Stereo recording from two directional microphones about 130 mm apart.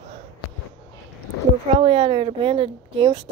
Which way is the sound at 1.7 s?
45° right (ahead or behind).